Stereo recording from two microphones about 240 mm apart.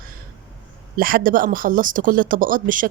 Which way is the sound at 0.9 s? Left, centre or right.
Right.